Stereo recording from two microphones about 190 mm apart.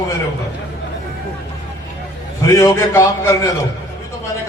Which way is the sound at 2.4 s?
15° left (ahead or behind).